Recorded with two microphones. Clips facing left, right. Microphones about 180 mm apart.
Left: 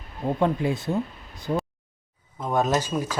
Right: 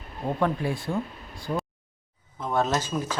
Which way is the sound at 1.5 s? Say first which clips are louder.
Left 3 dB; 25° left (ahead or behind).